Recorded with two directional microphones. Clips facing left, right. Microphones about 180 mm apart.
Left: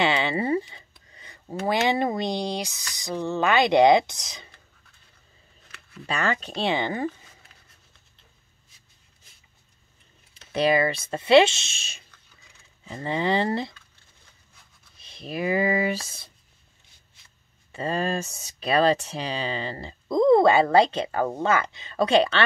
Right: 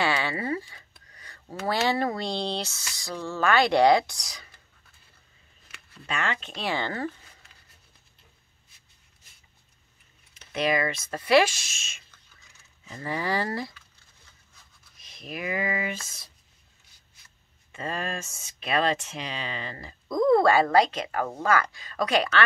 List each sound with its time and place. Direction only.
0.0 s a sound: 20° left (ahead or behind)
1.7 s speech: 20° left (ahead or behind)
6.0 s speech: 40° left (ahead or behind)
6.6 s speech: 20° left (ahead or behind)
10.3 s speech: 30° left (ahead or behind)
15.0 s speech: 30° left (ahead or behind)
17.7 s speech: 30° left (ahead or behind)